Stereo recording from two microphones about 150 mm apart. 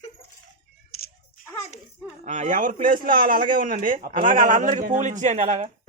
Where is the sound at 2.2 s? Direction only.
55° right (ahead or behind).